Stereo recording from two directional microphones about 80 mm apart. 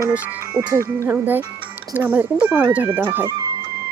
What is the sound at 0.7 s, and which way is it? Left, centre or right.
Speech, right.